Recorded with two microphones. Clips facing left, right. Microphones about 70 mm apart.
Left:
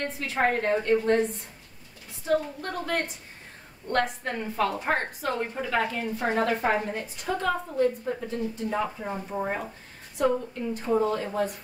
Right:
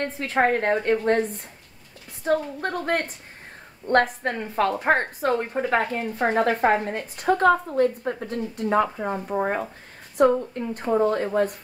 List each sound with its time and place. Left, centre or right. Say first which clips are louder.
0.0 s a woman's voice: right 4 dB; right
2.2 s a woman's voice: right 3 dB; right